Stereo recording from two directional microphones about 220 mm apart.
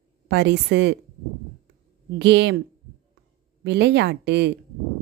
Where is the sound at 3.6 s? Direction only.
50° right (ahead or behind).